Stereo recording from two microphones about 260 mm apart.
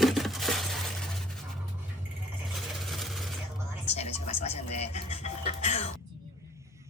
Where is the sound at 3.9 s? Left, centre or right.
Left.